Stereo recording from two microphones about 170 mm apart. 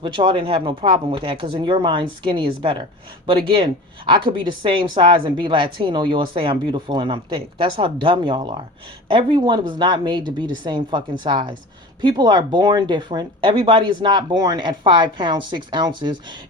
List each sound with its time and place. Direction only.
0.0 s speech: 30° right (ahead or behind)